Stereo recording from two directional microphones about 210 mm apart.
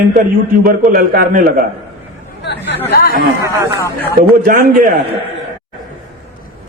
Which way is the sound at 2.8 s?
45° left (ahead or behind).